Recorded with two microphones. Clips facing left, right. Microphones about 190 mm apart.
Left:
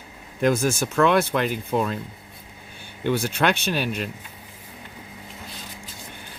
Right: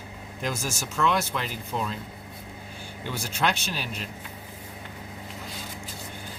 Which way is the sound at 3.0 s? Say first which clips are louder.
Left 7 dB; 60° left (ahead or behind).